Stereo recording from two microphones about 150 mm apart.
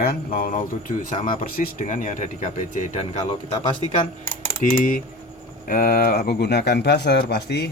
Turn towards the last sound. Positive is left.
turn(degrees=90)